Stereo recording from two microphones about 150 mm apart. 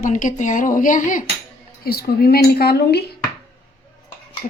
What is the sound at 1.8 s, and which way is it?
A woman's voice, 90° left.